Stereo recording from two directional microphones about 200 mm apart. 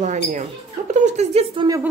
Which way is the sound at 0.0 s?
35° right (ahead or behind).